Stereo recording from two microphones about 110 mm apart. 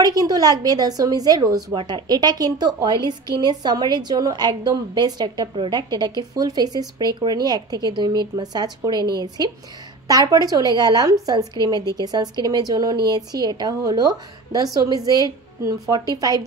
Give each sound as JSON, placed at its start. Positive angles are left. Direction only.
{"t": 0.0, "sound": "a woman's voice", "side_deg": -35}